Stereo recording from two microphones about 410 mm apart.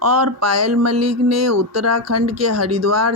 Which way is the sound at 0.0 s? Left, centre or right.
Right.